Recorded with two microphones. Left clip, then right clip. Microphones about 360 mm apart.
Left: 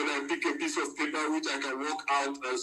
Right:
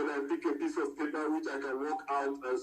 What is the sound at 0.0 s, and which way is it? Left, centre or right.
Speech, left.